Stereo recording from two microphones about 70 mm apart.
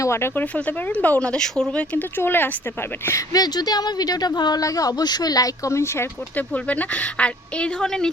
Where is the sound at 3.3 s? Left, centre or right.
Left.